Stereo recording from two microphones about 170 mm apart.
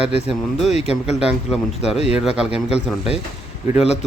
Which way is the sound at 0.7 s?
40° left (ahead or behind).